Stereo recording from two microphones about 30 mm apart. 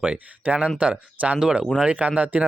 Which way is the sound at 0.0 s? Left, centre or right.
Right.